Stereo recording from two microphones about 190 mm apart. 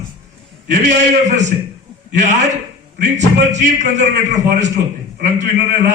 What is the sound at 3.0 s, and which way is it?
A man's voice, 40° right (ahead or behind).